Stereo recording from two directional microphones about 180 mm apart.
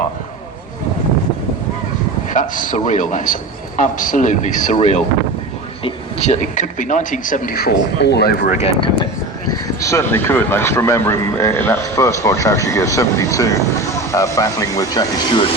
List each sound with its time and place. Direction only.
2.3 s speech: 45° left (ahead or behind); by 8.4 s 65° left (ahead or behind)
8.4 s speech: 40° left (ahead or behind)
9.5 s speech: 15° left (ahead or behind)